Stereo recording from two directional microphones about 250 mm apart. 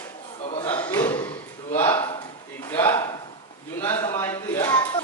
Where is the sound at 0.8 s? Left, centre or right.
Centre.